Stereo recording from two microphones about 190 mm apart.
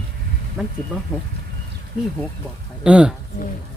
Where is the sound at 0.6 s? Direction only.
Centre (ahead or behind).